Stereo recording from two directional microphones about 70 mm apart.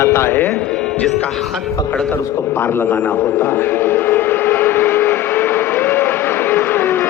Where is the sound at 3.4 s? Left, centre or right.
Left.